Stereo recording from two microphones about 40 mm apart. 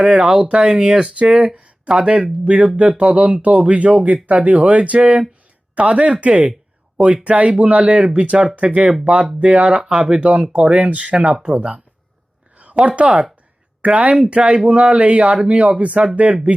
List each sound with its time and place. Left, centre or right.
0.0 s speech: right
11.3 s speech: centre
12.5 s a sound: right
13.0 s speech: right